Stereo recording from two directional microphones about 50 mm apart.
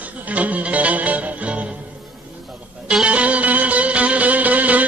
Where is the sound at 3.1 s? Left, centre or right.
Right.